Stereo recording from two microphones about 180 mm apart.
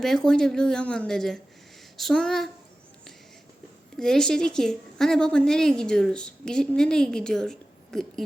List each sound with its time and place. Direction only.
0.0 s a woman's voice: 5° left (ahead or behind)
3.9 s a woman's voice: 5° left (ahead or behind)